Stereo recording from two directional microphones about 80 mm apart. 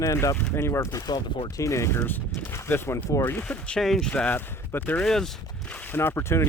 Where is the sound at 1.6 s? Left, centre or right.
Left.